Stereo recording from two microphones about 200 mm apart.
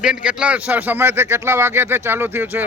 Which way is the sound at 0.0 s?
5° right (ahead or behind).